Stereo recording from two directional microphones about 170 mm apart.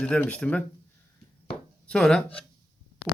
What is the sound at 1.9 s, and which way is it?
Speech, 5° left (ahead or behind).